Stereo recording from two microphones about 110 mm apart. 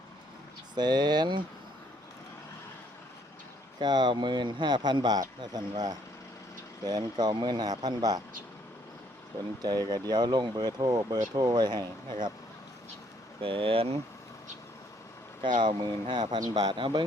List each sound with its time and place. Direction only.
0.8 s speech: 40° right (ahead or behind)
3.8 s speech: 40° right (ahead or behind)
9.6 s speech: 35° right (ahead or behind)
13.4 s speech: 55° right (ahead or behind)
15.4 s speech: 45° right (ahead or behind)